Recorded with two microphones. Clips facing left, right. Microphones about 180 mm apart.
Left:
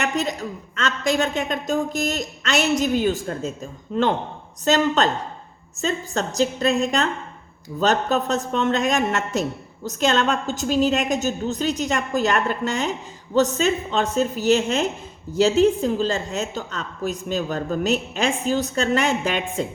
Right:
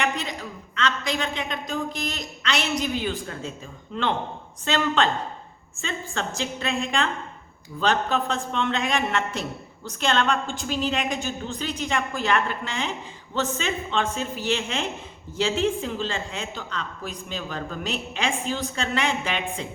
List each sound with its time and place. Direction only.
0.0 s a man's voice: 45° left (ahead or behind)